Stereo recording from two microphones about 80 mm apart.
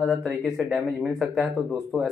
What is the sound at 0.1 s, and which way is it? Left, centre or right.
Speech, centre.